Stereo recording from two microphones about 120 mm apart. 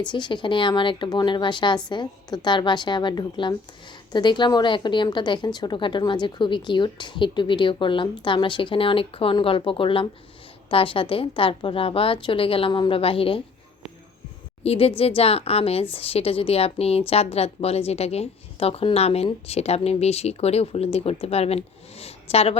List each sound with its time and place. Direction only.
0.1 s a woman's voice: 40° left (ahead or behind)
14.6 s a woman's voice: 55° left (ahead or behind)